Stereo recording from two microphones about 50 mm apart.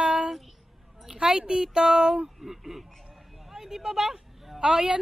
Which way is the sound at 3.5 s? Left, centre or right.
Centre.